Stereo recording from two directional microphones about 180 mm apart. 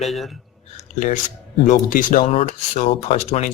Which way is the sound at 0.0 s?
Centre (ahead or behind).